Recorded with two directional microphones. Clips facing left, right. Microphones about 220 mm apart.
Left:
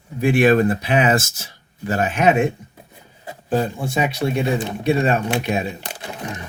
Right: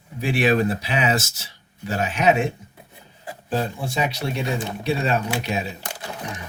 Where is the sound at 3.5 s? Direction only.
50° left (ahead or behind).